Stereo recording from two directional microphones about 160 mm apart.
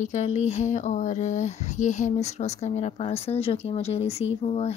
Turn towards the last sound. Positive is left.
turn(degrees=40)  # may be behind; listen again after turning